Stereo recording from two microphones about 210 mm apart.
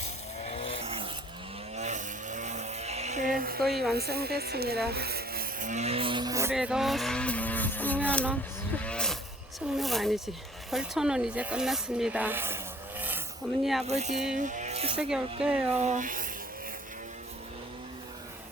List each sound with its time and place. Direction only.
0.4 s vehicle: 25° left (ahead or behind)
0.9 s a sound: 25° right (ahead or behind)
1.7 s vehicle: 35° right (ahead or behind)
3.9 s speech: 50° right (ahead or behind); by 6.5 s 15° right (ahead or behind)
6.5 s speech: 5° right (ahead or behind)
8.8 s wild animals: 5° left (ahead or behind)
9.6 s speech: centre (ahead or behind)
13.8 s speech: 30° right (ahead or behind)
15.4 s speech: 5° right (ahead or behind)
15.7 s speech: 35° right (ahead or behind)